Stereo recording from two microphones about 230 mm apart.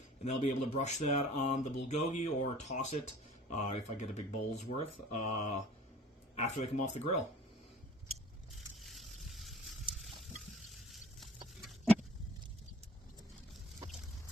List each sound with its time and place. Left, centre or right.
0.3 s speech: left
8.8 s boat: centre
10.7 s a sound: centre